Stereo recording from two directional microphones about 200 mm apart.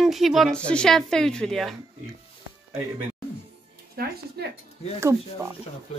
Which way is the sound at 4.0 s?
50° right (ahead or behind).